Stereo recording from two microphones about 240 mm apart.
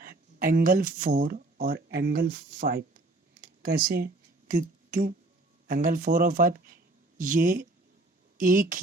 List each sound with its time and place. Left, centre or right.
0.0 s speech: right
3.4 s a sound: right
5.6 s speech: right